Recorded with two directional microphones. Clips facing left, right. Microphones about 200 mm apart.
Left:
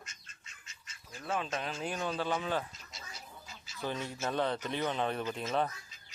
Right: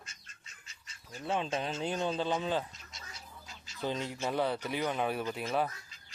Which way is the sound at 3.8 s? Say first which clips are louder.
Right 2 dB; 15° right (ahead or behind).